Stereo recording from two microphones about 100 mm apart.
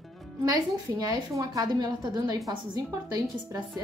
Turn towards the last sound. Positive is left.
turn(degrees=-40)  # may be behind; listen again after turning